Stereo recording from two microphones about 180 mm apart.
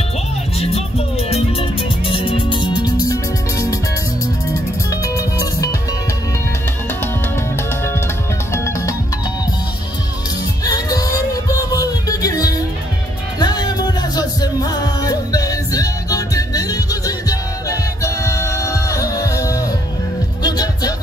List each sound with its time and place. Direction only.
0.6 s music: 35° left (ahead or behind); by 3.8 s 20° left (ahead or behind)
5.0 s music: 20° left (ahead or behind)
8.5 s music: 15° left (ahead or behind)
10.6 s music: 20° left (ahead or behind)